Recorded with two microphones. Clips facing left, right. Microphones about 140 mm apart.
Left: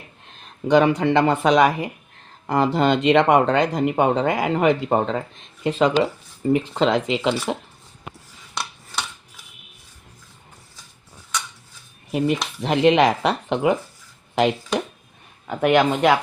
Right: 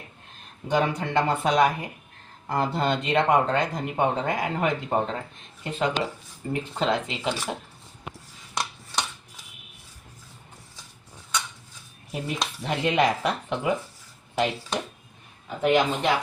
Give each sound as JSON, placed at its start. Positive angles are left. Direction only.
{"t": 0.4, "sound": "speech", "side_deg": 90}
{"t": 12.6, "sound": "speech", "side_deg": 90}
{"t": 15.4, "sound": "speech", "side_deg": 70}